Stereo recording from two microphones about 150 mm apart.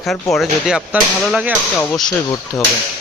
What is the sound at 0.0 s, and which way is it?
Speech, centre (ahead or behind).